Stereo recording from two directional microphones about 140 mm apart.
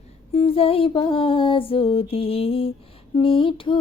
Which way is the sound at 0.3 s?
40° left (ahead or behind).